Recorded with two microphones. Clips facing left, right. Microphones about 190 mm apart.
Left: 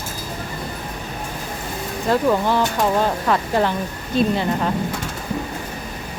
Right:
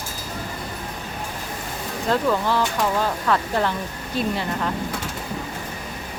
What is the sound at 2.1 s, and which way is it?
Speech, 15° left (ahead or behind).